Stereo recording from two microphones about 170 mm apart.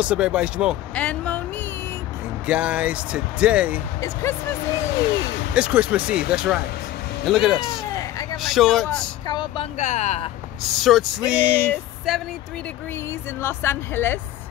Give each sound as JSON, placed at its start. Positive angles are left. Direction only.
{"t": 0.0, "sound": "speech", "side_deg": -5}
{"t": 0.9, "sound": "speech", "side_deg": 5}
{"t": 2.4, "sound": "speech", "side_deg": -10}
{"t": 4.0, "sound": "speech", "side_deg": 15}
{"t": 5.5, "sound": "speech", "side_deg": -5}
{"t": 7.9, "sound": "a sound", "side_deg": 20}
{"t": 8.4, "sound": "speech", "side_deg": 0}
{"t": 9.3, "sound": "speech", "side_deg": 30}
{"t": 9.8, "sound": "speech", "side_deg": 45}
{"t": 10.8, "sound": "speech", "side_deg": 0}
{"t": 13.4, "sound": "speech", "side_deg": 15}